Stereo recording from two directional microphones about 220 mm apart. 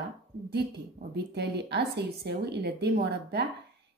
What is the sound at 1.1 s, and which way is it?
Speech, 50° right (ahead or behind).